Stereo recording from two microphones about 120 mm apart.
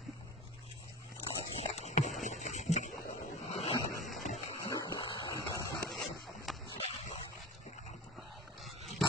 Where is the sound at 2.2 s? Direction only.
90° left; by 2.9 s 70° left (ahead or behind).